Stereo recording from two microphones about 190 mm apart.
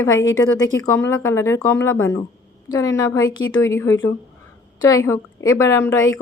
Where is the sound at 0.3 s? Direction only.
15° left (ahead or behind).